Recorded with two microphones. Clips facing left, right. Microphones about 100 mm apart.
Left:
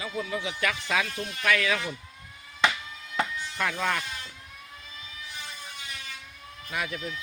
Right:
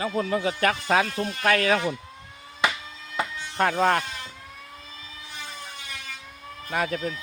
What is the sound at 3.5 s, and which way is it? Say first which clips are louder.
Speech: right 8 dB; 40° right (ahead or behind).